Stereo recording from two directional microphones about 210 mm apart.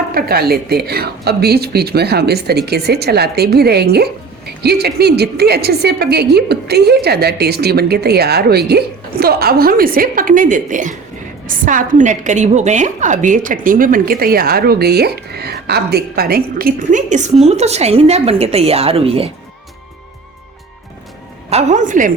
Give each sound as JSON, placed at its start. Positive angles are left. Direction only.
{"t": 0.1, "sound": "a woman's voice", "side_deg": -45}
{"t": 21.5, "sound": "a woman's voice", "side_deg": -35}